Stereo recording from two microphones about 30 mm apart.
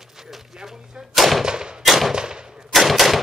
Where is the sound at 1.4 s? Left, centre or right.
Right.